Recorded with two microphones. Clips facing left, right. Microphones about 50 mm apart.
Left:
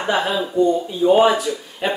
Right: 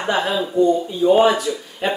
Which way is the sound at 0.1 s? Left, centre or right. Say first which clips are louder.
Even; centre.